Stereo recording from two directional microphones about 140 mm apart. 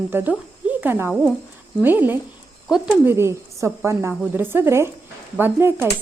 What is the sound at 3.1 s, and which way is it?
A woman's voice, 20° right (ahead or behind).